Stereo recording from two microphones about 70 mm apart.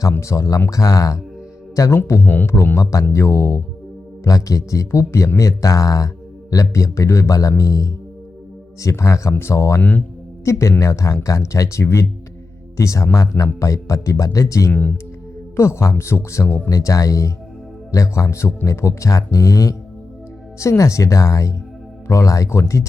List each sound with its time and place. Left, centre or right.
0.2 s speech: left
2.2 s speech: left
2.7 s speech: left
14.7 s speech: left
15.5 s speech: left